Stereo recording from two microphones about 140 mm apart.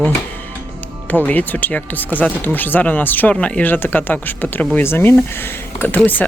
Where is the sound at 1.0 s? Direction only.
10° left (ahead or behind).